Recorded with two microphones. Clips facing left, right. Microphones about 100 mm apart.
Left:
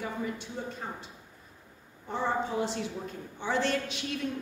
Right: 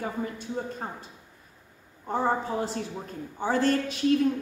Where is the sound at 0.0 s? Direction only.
45° right (ahead or behind).